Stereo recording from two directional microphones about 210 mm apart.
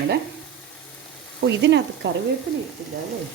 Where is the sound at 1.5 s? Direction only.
55° right (ahead or behind).